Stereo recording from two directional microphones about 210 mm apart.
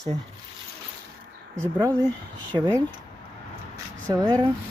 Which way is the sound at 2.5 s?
20° right (ahead or behind).